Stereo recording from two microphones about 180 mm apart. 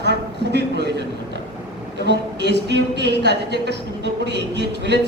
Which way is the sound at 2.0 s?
70° right (ahead or behind).